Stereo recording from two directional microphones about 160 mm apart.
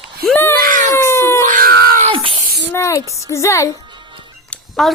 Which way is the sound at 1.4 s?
55° right (ahead or behind).